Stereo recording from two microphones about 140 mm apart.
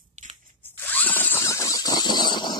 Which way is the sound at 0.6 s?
15° left (ahead or behind).